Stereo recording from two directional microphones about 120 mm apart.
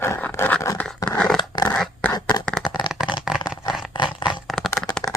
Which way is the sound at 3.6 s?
40° left (ahead or behind).